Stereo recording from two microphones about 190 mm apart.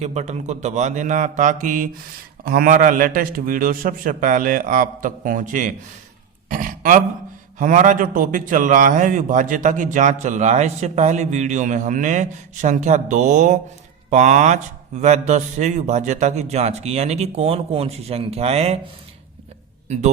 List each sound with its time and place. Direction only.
0.0 s a man's voice: 35° right (ahead or behind)